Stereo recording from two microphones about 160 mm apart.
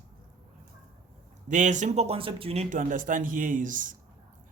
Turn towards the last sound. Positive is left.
turn(degrees=-55)  # may be behind; listen again after turning